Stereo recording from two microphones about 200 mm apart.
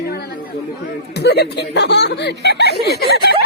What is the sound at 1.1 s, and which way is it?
Speech, 55° left (ahead or behind).